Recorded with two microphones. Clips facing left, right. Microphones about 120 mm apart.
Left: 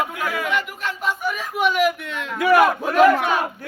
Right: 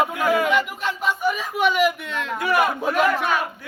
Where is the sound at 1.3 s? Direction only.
Centre (ahead or behind).